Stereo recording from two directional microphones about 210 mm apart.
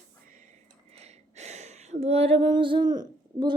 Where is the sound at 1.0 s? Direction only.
30° right (ahead or behind).